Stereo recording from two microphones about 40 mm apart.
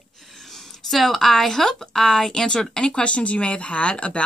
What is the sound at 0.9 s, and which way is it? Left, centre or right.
Speech, centre.